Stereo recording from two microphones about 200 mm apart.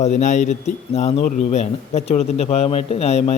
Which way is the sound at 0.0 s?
35° left (ahead or behind).